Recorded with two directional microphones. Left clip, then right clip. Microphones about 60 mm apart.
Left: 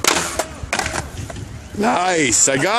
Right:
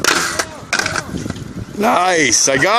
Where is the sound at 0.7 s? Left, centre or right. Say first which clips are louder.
Right 5 dB; right.